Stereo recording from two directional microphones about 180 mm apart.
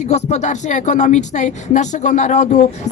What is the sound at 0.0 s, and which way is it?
Speech, 40° left (ahead or behind).